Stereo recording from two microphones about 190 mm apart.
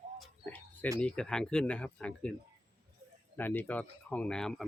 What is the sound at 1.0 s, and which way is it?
Speech, 5° left (ahead or behind).